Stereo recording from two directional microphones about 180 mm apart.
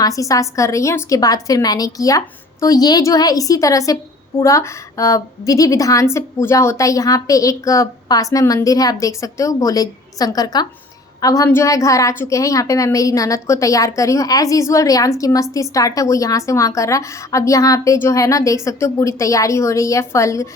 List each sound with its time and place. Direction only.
0.0 s a woman's voice: 20° left (ahead or behind)